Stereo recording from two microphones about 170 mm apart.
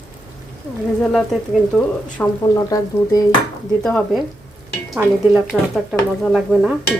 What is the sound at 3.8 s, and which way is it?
Speech, 5° left (ahead or behind).